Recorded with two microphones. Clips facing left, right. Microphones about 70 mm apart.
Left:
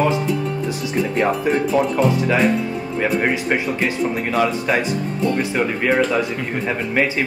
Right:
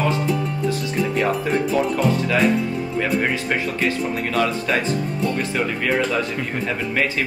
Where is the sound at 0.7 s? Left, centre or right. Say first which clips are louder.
Right 2 dB; centre.